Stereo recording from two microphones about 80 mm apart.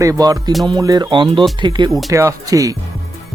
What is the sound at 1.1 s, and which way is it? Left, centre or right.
Speech, right.